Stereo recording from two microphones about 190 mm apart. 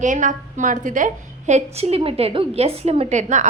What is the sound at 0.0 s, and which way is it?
A woman's voice, 40° right (ahead or behind).